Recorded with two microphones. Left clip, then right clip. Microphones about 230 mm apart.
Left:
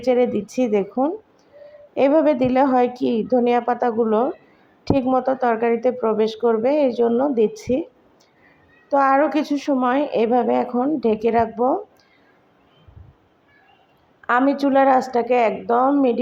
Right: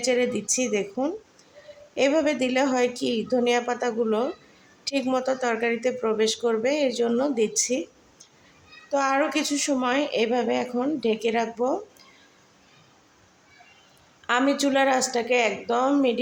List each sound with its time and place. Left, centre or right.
0.0 s a woman's voice: centre
8.9 s a woman's voice: centre
14.3 s a woman's voice: centre